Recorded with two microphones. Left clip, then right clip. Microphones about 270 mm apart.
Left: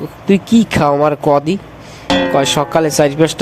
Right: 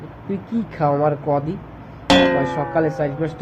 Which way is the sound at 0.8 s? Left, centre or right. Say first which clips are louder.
Left 4 dB; left.